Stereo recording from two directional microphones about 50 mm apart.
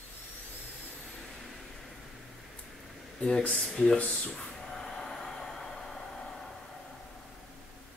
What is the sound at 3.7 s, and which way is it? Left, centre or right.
Speech, centre.